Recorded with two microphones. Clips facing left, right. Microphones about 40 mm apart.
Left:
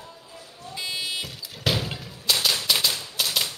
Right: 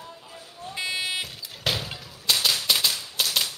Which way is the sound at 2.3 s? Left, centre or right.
Centre.